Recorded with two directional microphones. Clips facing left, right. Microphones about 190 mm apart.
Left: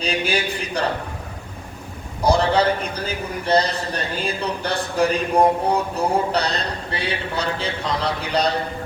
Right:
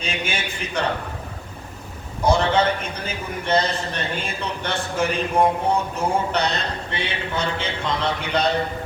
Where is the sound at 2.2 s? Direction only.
35° left (ahead or behind).